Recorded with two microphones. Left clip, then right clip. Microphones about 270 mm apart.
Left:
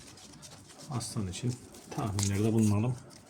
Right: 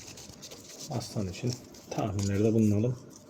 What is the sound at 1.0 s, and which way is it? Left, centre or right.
Speech, centre.